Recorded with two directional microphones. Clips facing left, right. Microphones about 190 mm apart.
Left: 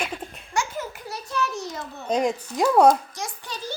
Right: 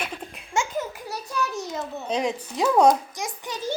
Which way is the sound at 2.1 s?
10° left (ahead or behind).